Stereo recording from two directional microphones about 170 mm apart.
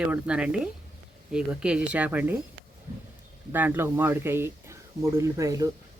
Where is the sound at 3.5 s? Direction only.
10° right (ahead or behind).